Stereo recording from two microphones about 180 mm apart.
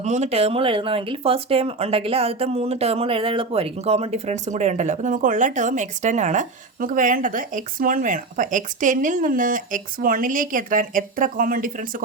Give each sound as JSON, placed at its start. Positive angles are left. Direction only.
{"t": 0.0, "sound": "speech", "side_deg": -40}